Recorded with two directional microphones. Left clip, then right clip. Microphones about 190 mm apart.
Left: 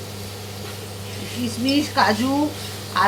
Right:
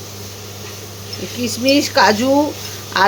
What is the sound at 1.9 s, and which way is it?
A woman's voice, 55° right (ahead or behind).